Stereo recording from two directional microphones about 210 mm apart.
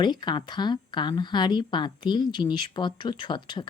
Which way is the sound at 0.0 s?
20° left (ahead or behind).